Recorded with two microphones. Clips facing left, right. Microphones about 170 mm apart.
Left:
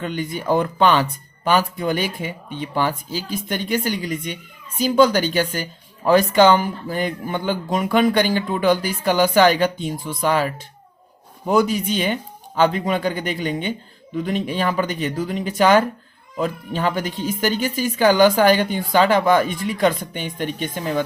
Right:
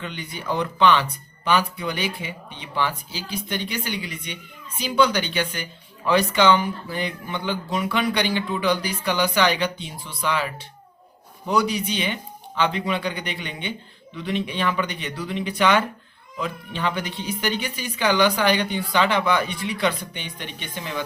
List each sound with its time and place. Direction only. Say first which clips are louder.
0.0 s speech: left 8 dB; 45° left (ahead or behind)